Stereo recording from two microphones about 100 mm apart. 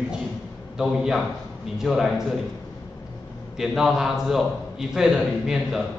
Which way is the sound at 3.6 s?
5° right (ahead or behind).